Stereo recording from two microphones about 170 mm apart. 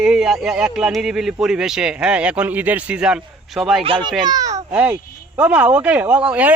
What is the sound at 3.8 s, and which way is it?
Speech, 30° right (ahead or behind).